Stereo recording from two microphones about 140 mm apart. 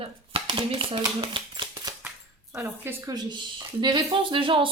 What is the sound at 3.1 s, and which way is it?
Speech, 30° right (ahead or behind).